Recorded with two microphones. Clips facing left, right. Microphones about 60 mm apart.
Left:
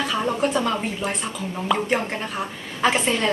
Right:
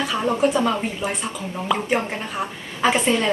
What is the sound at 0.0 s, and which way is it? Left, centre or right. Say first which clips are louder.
Speech: right 2 dB; centre.